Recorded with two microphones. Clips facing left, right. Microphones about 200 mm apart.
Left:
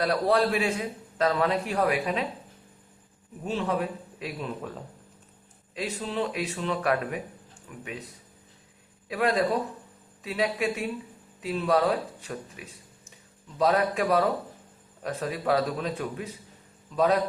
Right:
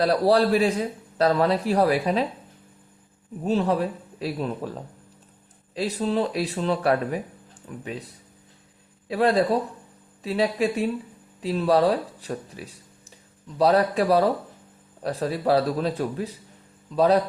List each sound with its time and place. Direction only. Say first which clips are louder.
0.0 s a man's voice: right 4 dB; 35° right (ahead or behind)
3.4 s a man's voice: right 6 dB; 40° right (ahead or behind)
5.7 s a man's voice: right 6 dB; 35° right (ahead or behind)
9.0 s a man's voice: right 4 dB; 30° right (ahead or behind)